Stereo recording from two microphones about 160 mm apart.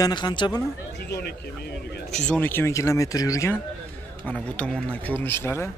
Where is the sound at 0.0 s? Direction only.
25° left (ahead or behind).